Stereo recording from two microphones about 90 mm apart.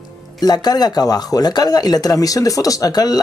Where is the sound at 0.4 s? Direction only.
50° left (ahead or behind).